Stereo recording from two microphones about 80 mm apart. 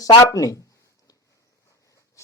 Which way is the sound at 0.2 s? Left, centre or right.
Left.